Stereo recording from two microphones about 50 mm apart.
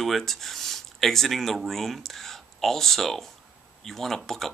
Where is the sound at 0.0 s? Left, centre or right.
Centre.